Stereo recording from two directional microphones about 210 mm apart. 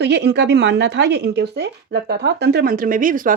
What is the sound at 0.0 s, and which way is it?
Speech, 55° right (ahead or behind).